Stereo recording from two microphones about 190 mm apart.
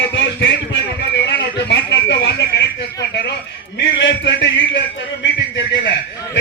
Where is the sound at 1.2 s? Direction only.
65° left (ahead or behind).